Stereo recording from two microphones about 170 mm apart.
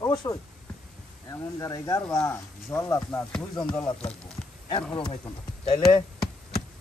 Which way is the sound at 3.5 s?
20° left (ahead or behind).